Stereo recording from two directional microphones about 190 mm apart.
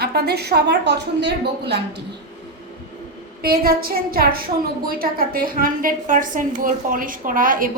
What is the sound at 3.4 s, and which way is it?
A woman's voice, 55° right (ahead or behind).